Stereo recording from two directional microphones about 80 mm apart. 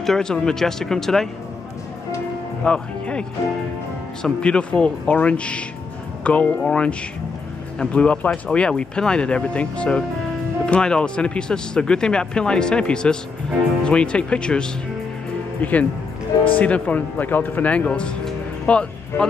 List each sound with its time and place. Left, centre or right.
0.0 s speech: centre
2.6 s speech: centre